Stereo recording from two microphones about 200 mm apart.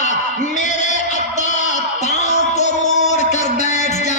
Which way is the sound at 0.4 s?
35° left (ahead or behind).